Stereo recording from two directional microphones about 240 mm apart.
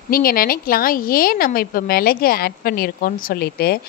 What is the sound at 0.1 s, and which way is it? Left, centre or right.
A woman's voice, left.